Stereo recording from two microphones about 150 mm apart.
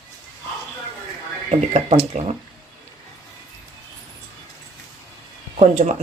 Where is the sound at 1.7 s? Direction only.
45° right (ahead or behind).